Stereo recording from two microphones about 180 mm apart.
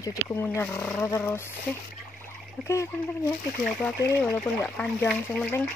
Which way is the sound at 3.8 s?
10° left (ahead or behind).